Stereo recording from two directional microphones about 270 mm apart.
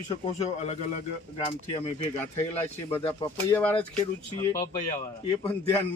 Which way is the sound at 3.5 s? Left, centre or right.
Centre.